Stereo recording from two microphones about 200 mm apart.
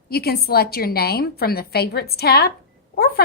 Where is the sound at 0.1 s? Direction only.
50° left (ahead or behind).